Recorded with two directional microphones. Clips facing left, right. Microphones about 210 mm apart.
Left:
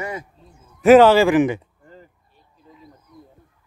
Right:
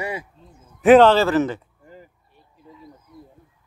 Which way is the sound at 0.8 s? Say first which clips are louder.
Left 1 dB; 5° left (ahead or behind).